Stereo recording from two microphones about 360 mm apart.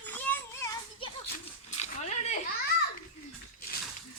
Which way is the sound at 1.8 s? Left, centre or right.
Centre.